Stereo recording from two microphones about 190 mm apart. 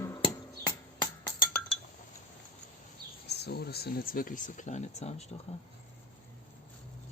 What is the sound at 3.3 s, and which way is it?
Speech, 60° left (ahead or behind).